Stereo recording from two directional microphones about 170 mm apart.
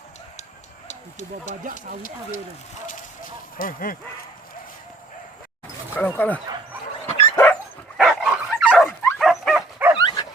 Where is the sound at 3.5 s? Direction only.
55° left (ahead or behind).